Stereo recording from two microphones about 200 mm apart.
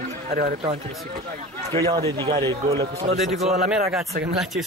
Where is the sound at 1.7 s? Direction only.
25° right (ahead or behind).